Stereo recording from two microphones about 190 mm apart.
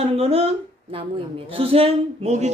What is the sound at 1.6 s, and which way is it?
Speech, 30° right (ahead or behind).